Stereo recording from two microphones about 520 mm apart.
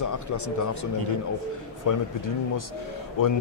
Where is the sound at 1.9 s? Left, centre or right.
Left.